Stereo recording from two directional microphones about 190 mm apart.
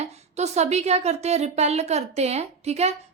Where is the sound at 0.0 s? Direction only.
35° right (ahead or behind).